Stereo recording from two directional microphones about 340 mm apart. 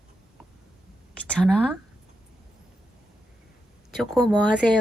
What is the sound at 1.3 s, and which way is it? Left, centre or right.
Speech, centre.